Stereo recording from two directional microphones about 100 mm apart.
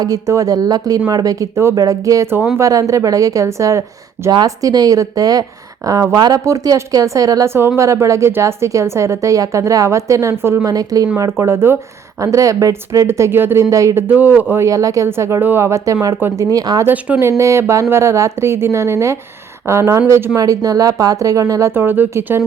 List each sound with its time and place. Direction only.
0.0 s speech: 35° right (ahead or behind)
10.7 s speech: 40° right (ahead or behind)
11.2 s speech: 25° right (ahead or behind)
14.1 s speech: 20° right (ahead or behind)
14.5 s speech: 30° right (ahead or behind)
16.8 s speech: 15° right (ahead or behind)
17.2 s speech: 30° right (ahead or behind)
20.3 s speech: 40° right (ahead or behind)
21.7 s speech: 20° right (ahead or behind)